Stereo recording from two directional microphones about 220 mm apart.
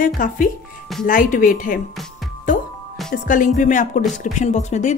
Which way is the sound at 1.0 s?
40° left (ahead or behind).